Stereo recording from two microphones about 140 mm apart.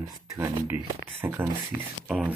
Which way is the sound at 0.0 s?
25° right (ahead or behind).